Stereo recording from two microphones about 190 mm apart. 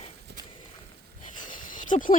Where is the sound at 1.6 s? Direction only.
45° left (ahead or behind).